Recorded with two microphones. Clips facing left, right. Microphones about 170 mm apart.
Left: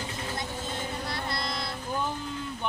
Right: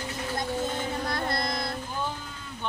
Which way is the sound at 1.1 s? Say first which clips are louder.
Right 4 dB; 50° right (ahead or behind).